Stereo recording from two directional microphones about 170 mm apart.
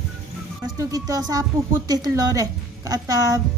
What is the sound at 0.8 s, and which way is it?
Speech, 20° right (ahead or behind).